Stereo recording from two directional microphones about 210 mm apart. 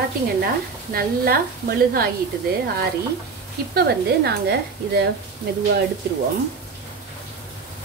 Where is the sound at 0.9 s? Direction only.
45° right (ahead or behind).